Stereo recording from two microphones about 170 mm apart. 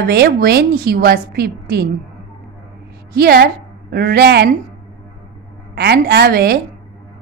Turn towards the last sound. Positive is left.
turn(degrees=-70)  # may be behind; listen again after turning